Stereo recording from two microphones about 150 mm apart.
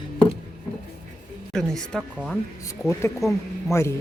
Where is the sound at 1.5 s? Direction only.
5° left (ahead or behind).